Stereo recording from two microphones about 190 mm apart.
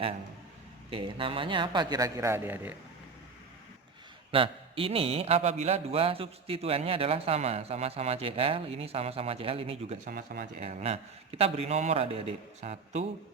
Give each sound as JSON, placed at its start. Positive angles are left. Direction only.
{"t": 0.9, "sound": "a man's voice", "side_deg": -25}
{"t": 4.3, "sound": "a man's voice", "side_deg": -30}
{"t": 10.1, "sound": "speech", "side_deg": -50}
{"t": 10.7, "sound": "a man's voice", "side_deg": -35}